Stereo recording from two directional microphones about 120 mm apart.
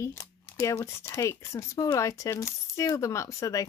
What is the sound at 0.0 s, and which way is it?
Speech, 25° left (ahead or behind).